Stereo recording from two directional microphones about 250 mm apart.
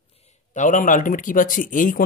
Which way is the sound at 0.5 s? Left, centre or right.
Left.